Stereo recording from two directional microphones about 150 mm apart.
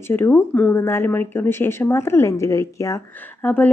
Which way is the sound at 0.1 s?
15° left (ahead or behind).